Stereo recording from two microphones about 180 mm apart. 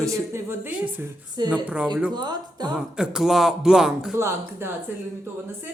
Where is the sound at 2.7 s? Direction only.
5° right (ahead or behind).